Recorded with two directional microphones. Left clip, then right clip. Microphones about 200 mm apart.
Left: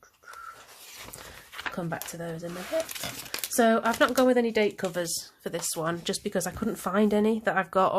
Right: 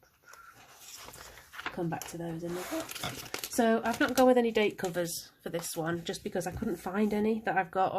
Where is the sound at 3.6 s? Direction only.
45° left (ahead or behind).